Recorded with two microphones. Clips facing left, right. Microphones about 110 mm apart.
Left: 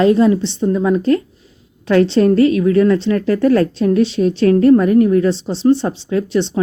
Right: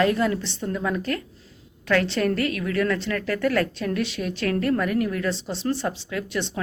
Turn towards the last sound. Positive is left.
turn(degrees=25)  # may be behind; listen again after turning